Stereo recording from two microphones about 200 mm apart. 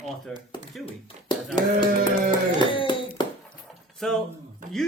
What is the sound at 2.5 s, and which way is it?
Hands, 25° left (ahead or behind).